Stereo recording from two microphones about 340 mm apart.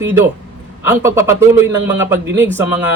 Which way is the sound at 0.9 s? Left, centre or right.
Centre.